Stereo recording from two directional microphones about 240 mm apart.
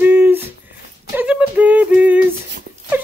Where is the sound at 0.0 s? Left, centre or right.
Centre.